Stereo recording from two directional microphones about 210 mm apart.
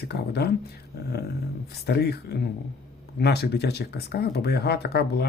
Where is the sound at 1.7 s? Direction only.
50° left (ahead or behind).